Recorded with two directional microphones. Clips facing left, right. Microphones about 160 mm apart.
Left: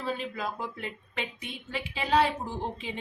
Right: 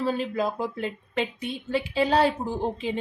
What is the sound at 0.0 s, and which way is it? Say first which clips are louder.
Speech: right 7 dB; 35° right (ahead or behind).